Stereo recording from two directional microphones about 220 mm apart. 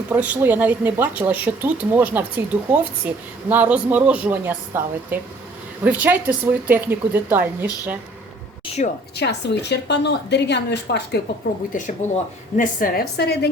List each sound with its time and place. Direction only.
0.1 s speech: 10° right (ahead or behind)
3.5 s speech: 10° right (ahead or behind)
8.8 s speech: 30° left (ahead or behind)
9.1 s a woman's voice: 50° left (ahead or behind)
11.7 s speech: 35° left (ahead or behind)